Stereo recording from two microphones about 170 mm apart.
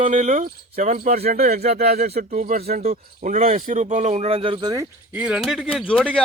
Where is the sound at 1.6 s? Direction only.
40° right (ahead or behind); by 4.9 s 20° right (ahead or behind).